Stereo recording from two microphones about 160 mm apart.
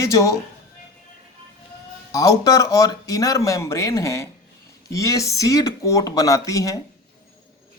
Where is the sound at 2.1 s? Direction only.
20° left (ahead or behind).